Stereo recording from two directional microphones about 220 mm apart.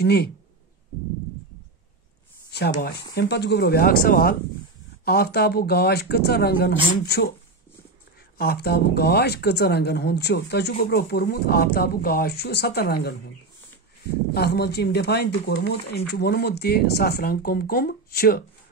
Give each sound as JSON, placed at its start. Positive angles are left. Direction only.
{"t": 0.0, "sound": "speech", "side_deg": 45}
{"t": 3.2, "sound": "speech", "side_deg": 50}
{"t": 8.4, "sound": "speech", "side_deg": 45}